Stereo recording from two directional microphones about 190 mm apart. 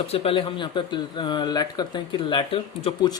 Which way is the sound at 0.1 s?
30° left (ahead or behind).